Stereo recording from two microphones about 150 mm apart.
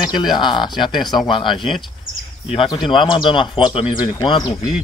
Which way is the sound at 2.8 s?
35° left (ahead or behind).